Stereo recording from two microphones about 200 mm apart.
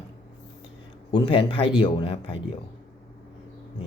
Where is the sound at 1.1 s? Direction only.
25° left (ahead or behind).